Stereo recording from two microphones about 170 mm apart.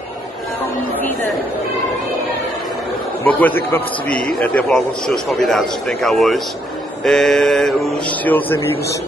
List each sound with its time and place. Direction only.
3.3 s a man's voice: 10° left (ahead or behind)